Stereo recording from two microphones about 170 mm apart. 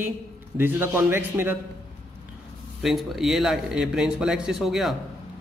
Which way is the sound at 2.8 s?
Centre (ahead or behind).